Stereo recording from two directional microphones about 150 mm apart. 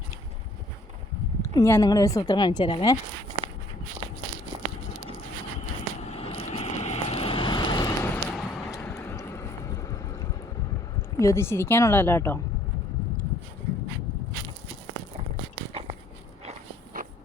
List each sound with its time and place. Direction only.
1.4 s speech: 20° left (ahead or behind)
5.5 s vehicle: 45° left (ahead or behind); by 8.2 s 25° left (ahead or behind)
8.3 s a sound: 5° left (ahead or behind)
8.7 s vehicle: 15° left (ahead or behind)
9.1 s boat: 20° left (ahead or behind)
11.2 s speech: 20° left (ahead or behind)